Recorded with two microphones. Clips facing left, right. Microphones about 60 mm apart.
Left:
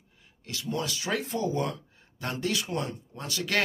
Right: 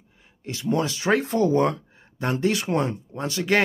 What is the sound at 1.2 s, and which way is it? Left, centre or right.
Speech, right.